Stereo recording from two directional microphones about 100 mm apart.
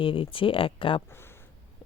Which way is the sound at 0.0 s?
60° left (ahead or behind).